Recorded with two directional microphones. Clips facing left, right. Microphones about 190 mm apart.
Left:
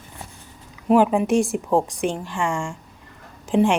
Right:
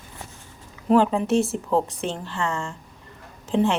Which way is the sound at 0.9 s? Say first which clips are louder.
Left 2 dB; 15° left (ahead or behind).